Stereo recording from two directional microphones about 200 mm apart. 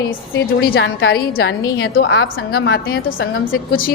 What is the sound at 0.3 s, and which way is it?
A woman's voice, 50° left (ahead or behind).